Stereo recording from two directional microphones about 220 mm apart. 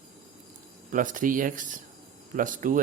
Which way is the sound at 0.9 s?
35° right (ahead or behind).